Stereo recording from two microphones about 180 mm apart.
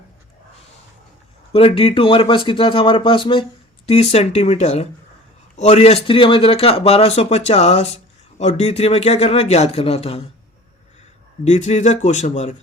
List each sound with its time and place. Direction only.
1.5 s speech: 30° left (ahead or behind)
11.4 s speech: 40° left (ahead or behind)